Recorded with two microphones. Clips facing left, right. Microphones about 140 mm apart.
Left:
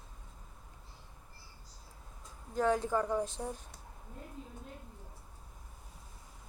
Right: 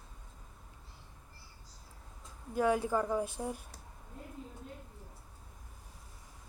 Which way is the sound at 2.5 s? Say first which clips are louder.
Right 1 dB; 10° right (ahead or behind).